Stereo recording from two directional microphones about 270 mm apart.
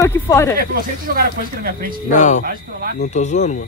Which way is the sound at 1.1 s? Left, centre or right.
Right.